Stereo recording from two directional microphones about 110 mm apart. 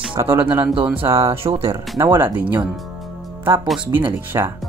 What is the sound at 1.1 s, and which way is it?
Speech, 25° right (ahead or behind).